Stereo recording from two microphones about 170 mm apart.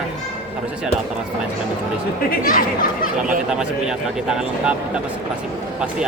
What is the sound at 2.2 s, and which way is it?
Speech, 55° left (ahead or behind).